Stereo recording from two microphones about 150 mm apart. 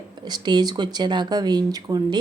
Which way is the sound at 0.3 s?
30° right (ahead or behind).